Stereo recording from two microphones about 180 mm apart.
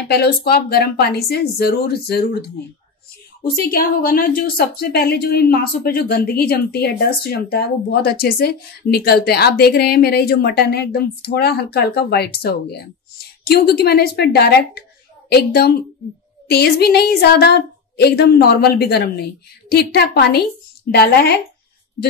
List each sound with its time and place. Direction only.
0.1 s a woman's voice: 60° left (ahead or behind)
3.5 s a woman's voice: 55° left (ahead or behind)